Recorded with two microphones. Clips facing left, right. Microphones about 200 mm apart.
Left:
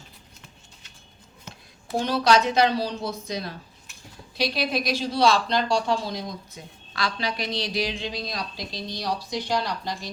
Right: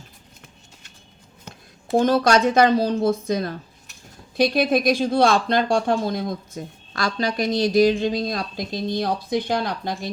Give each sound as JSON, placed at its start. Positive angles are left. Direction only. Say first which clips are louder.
{"t": 2.0, "sound": "speech", "louder": "right 4 dB", "side_deg": -50}